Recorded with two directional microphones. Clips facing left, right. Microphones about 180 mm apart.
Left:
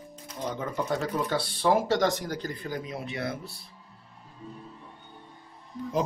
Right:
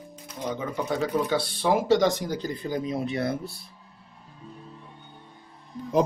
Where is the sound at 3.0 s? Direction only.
40° right (ahead or behind).